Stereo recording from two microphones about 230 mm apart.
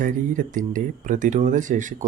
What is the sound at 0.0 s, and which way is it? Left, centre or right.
Speech, right.